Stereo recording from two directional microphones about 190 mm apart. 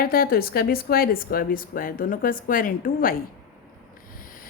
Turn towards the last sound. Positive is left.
turn(degrees=45)  # may be behind; listen again after turning